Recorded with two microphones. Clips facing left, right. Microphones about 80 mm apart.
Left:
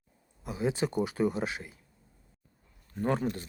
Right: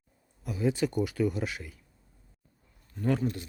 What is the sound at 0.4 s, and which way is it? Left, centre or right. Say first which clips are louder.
Speech: right 2 dB; left.